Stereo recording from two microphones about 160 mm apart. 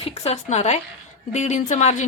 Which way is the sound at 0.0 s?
45° left (ahead or behind).